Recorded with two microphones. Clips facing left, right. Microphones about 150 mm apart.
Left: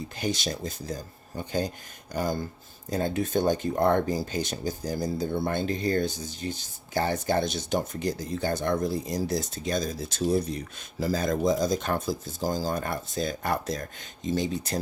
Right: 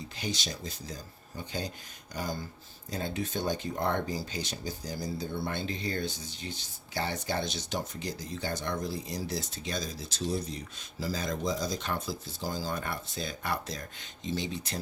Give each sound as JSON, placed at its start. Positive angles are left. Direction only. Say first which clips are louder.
{"t": 0.2, "sound": "speech", "louder": "left 7 dB", "side_deg": 50}